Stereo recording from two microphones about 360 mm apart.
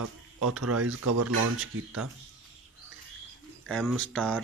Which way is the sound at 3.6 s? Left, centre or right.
Centre.